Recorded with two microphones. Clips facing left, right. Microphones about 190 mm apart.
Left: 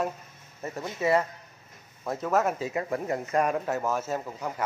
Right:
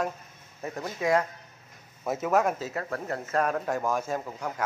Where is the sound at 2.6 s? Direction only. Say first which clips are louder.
Left 3 dB; 10° left (ahead or behind).